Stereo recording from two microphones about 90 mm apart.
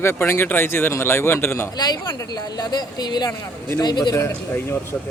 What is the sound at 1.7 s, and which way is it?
Speech, 50° left (ahead or behind).